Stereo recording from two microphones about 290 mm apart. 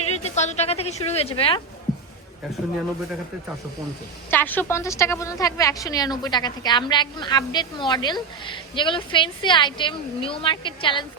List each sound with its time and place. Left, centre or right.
0.1 s a woman's voice: left
4.3 s a woman's voice: centre